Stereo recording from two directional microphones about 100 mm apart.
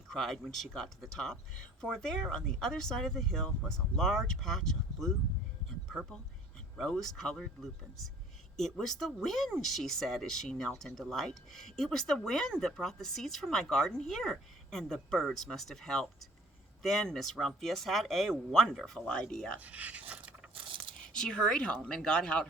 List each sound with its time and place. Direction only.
0.1 s speech: 5° left (ahead or behind)
6.7 s a woman's voice: 5° left (ahead or behind)
19.5 s speech: 15° right (ahead or behind)
20.7 s a sound: 55° right (ahead or behind)
21.1 s a woman's voice: 10° left (ahead or behind)